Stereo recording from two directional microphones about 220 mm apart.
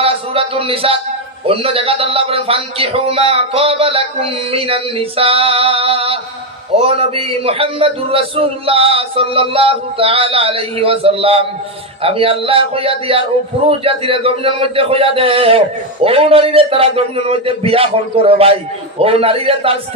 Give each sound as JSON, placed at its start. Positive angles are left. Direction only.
{"t": 0.0, "sound": "a man's voice", "side_deg": -25}